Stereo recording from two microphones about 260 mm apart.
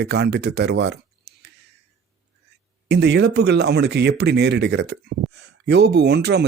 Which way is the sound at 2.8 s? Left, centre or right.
Right.